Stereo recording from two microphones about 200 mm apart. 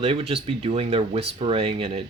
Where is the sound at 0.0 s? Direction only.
30° right (ahead or behind).